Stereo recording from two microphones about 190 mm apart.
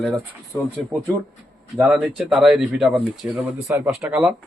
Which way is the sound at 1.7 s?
Centre (ahead or behind).